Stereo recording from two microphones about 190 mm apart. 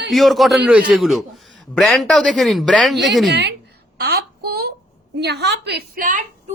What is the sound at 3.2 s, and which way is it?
Speech, 65° right (ahead or behind).